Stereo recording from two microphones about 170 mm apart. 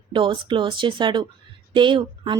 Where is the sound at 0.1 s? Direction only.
30° right (ahead or behind).